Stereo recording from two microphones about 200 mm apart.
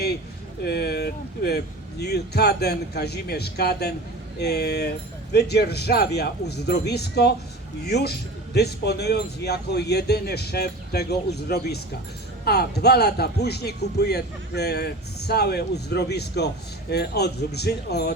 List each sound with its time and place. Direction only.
0.6 s a man's voice: 50° left (ahead or behind)